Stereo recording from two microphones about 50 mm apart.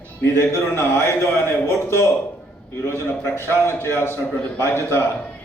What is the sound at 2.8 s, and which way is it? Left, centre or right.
A man's voice, left.